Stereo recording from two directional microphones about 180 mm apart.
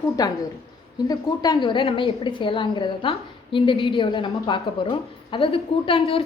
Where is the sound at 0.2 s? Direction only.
20° left (ahead or behind).